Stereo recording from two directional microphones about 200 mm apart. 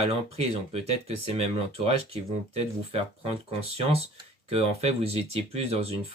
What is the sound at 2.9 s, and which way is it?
Speech, 30° right (ahead or behind).